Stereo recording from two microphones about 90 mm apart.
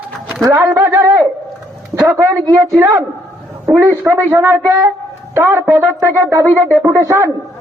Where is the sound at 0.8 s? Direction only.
40° right (ahead or behind).